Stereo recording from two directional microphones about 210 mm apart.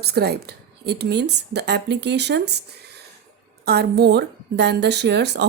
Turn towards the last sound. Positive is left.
turn(degrees=-55)  # may be behind; listen again after turning